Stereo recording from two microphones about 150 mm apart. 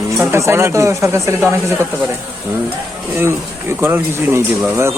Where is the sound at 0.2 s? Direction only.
15° right (ahead or behind).